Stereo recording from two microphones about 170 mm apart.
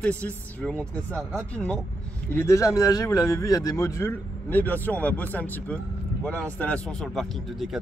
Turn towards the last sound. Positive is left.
turn(degrees=0)  # may be behind; listen again after turning